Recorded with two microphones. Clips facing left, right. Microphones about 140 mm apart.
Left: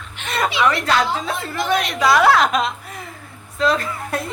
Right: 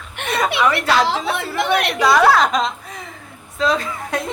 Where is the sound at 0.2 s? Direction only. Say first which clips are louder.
Right 6 dB; 55° right (ahead or behind).